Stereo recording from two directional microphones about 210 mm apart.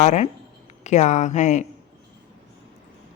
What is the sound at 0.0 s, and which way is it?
A woman's voice, 35° left (ahead or behind).